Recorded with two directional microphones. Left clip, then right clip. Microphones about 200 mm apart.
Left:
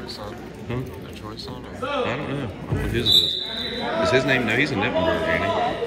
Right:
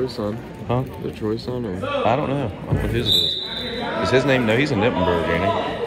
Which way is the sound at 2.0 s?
20° right (ahead or behind).